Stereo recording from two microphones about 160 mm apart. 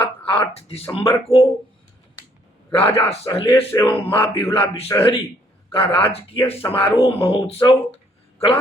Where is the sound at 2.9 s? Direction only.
15° left (ahead or behind).